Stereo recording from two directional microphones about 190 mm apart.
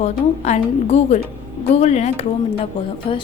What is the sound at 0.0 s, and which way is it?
A woman's voice, 35° left (ahead or behind).